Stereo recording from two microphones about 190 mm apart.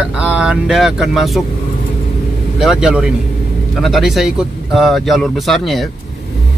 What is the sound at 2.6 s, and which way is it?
Speech, 5° right (ahead or behind).